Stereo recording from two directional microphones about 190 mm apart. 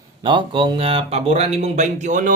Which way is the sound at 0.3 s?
25° right (ahead or behind).